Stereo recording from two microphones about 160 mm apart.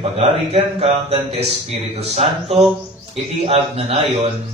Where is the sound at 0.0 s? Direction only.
40° right (ahead or behind).